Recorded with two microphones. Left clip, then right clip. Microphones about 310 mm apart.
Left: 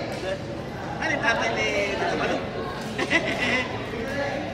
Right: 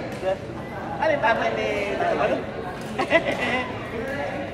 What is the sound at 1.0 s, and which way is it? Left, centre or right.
Speech, centre.